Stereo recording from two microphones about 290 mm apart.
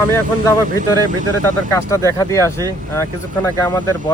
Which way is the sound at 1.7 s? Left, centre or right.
Centre.